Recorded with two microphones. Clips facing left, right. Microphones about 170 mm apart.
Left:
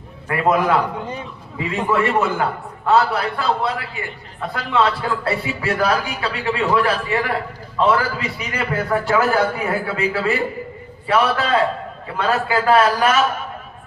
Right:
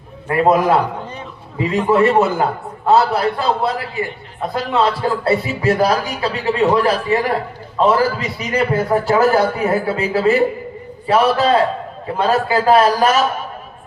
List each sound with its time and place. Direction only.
0.3 s a man's voice: 35° right (ahead or behind)